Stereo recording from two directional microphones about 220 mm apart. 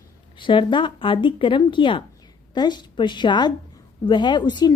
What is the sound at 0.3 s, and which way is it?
A woman's voice, 20° left (ahead or behind).